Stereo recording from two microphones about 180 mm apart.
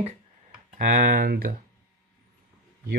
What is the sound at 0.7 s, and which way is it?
Speech, 50° right (ahead or behind).